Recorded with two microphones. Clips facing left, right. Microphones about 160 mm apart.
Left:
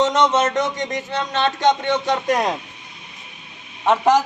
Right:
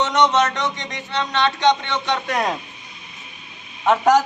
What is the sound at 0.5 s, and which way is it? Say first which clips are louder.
Speech: left 5 dB; 45° left (ahead or behind).